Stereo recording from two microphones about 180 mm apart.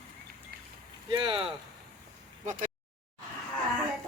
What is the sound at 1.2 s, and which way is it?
Speech, 30° right (ahead or behind).